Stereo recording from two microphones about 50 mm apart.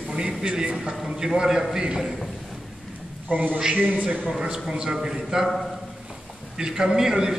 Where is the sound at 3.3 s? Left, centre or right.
Right.